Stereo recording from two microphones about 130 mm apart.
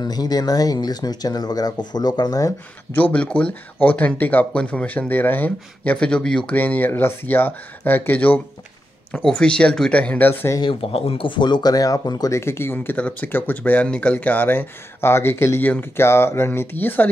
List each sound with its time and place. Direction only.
0.0 s speech: 30° left (ahead or behind)
3.0 s speech: 10° left (ahead or behind)
9.4 s speech: 5° left (ahead or behind)
10.6 s speech: 45° left (ahead or behind); by 17.1 s 15° left (ahead or behind)